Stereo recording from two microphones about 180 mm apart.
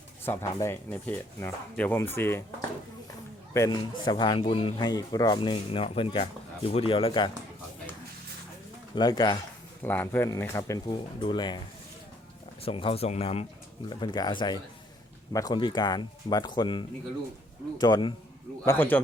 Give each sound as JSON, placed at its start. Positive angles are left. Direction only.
{"t": 0.3, "sound": "speech", "side_deg": 15}
{"t": 9.0, "sound": "speech", "side_deg": 25}
{"t": 9.8, "sound": "speech", "side_deg": 10}
{"t": 12.6, "sound": "speech", "side_deg": 30}